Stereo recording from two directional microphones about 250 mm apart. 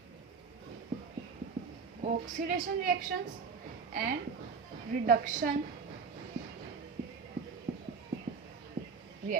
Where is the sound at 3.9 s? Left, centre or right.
Right.